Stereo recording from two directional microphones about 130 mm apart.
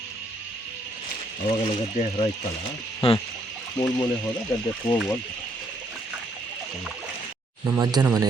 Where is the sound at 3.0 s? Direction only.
45° left (ahead or behind).